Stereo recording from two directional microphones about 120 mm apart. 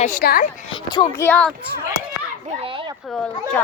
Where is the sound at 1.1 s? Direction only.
20° left (ahead or behind).